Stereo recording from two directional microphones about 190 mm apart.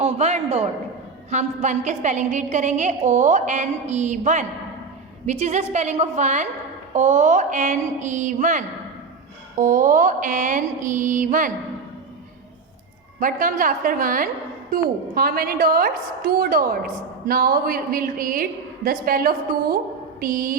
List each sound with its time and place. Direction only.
0.0 s a man's voice: 35° right (ahead or behind)
13.1 s a woman's voice: 45° right (ahead or behind)